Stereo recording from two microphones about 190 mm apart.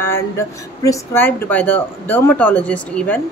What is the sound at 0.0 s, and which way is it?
Speech, 15° left (ahead or behind).